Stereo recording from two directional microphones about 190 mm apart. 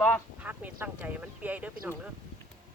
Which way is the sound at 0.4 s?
10° right (ahead or behind).